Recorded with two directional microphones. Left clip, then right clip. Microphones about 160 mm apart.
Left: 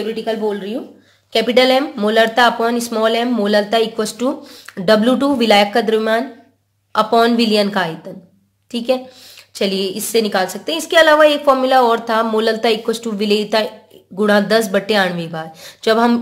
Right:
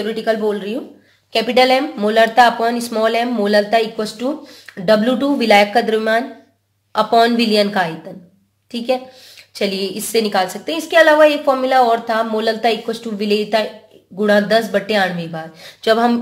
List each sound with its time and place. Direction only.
0.0 s speech: 5° right (ahead or behind)
1.3 s a woman's voice: 20° left (ahead or behind)